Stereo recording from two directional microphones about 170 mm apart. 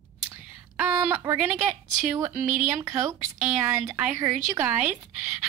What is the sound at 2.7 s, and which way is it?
Speech, 15° right (ahead or behind).